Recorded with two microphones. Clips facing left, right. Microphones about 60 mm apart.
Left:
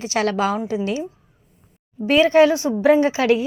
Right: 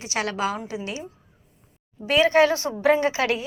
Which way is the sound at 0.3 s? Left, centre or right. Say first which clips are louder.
Left 6 dB; left.